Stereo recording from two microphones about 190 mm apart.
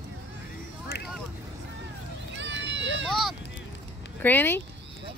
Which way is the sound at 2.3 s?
70° right (ahead or behind).